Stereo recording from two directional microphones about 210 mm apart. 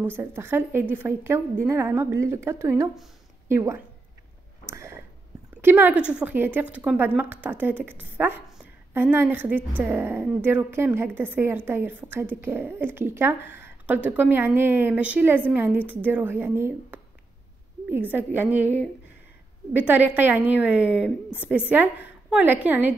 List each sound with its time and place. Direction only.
0.2 s a woman's voice: 10° right (ahead or behind)
4.6 s a sound: 15° right (ahead or behind)
5.6 s a woman's voice: 10° right (ahead or behind)
18.1 s a woman's voice: 10° right (ahead or behind)
19.7 s a woman's voice: 10° right (ahead or behind)